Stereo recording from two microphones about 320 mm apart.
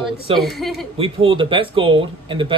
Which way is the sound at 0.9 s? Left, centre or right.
Centre.